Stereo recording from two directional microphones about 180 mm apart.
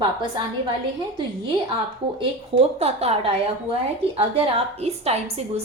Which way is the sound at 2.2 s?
30° right (ahead or behind).